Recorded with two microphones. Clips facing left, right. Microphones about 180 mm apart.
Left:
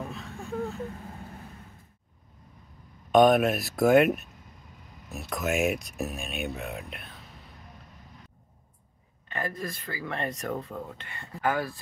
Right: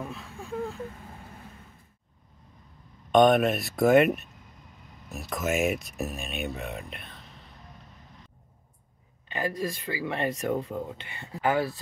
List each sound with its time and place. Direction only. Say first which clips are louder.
0.0 s a sound: left 1 dB; centre (ahead or behind)
3.1 s speech: even; centre (ahead or behind)
9.3 s speech: right 4 dB; 10° right (ahead or behind)
10.7 s speech: right 4 dB; 20° right (ahead or behind)